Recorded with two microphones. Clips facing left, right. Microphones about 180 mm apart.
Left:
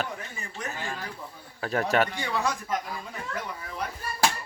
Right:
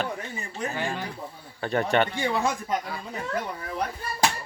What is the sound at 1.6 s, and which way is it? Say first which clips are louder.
Speech: right 1 dB; centre (ahead or behind).